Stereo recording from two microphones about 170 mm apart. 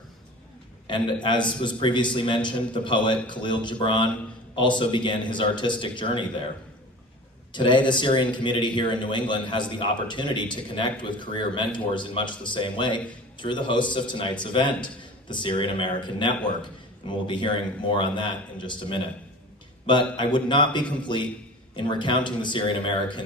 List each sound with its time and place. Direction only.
0.9 s a man's voice: 30° left (ahead or behind)
7.5 s a man's voice: 25° left (ahead or behind)